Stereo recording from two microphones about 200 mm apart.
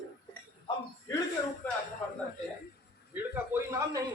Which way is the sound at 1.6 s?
10° left (ahead or behind).